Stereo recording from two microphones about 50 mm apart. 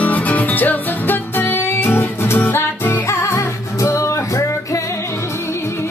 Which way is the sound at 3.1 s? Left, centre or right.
Left.